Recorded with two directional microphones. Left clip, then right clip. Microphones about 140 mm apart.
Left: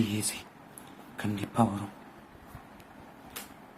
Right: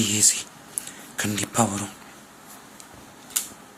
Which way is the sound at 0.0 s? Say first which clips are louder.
Right 11 dB; 15° right (ahead or behind).